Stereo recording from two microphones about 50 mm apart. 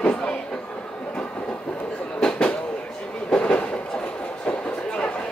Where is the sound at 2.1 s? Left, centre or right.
Centre.